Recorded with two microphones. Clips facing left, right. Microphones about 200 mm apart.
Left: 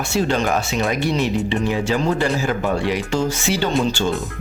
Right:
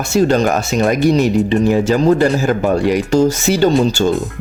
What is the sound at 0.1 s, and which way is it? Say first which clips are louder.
Speech: right 7 dB; 40° right (ahead or behind).